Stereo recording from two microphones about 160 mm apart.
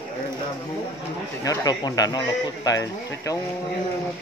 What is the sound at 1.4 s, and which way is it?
Speech, 25° left (ahead or behind).